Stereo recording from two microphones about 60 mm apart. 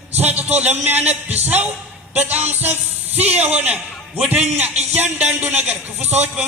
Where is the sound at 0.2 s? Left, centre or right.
Right.